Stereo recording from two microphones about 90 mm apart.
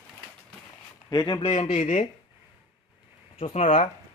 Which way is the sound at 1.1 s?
50° left (ahead or behind).